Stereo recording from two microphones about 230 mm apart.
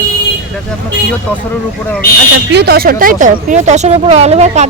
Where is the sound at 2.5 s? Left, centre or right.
Right.